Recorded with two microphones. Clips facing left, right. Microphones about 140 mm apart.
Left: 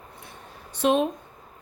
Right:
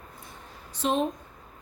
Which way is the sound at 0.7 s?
70° left (ahead or behind).